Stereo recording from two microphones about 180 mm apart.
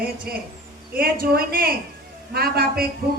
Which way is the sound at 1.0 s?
55° right (ahead or behind).